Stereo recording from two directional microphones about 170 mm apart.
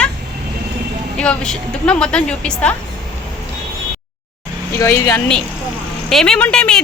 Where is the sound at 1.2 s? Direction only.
5° left (ahead or behind).